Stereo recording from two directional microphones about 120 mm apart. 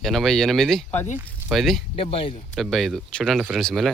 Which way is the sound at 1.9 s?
50° left (ahead or behind).